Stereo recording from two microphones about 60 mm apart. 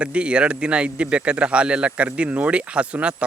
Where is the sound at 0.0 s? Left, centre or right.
Centre.